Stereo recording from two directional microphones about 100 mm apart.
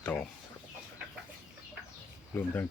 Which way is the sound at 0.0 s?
15° left (ahead or behind).